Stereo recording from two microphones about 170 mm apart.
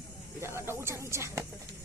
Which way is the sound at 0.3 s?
15° right (ahead or behind).